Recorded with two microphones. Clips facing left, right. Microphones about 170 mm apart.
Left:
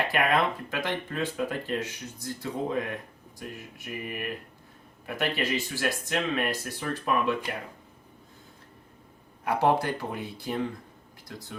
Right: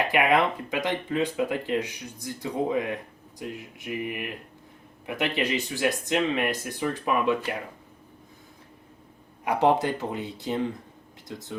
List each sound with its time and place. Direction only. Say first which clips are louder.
0.1 s speech: right 3 dB; 15° right (ahead or behind)
9.4 s speech: right 2 dB; 15° right (ahead or behind)